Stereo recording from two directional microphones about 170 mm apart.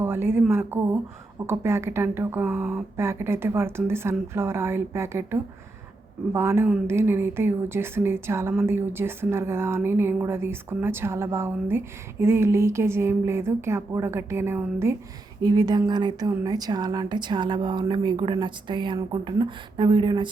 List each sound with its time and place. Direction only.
0.0 s a woman's voice: 15° right (ahead or behind)